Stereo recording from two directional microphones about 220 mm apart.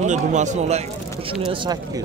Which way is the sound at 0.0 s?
35° right (ahead or behind).